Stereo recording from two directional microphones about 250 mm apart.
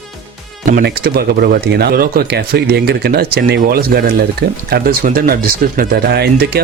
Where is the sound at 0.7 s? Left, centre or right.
Right.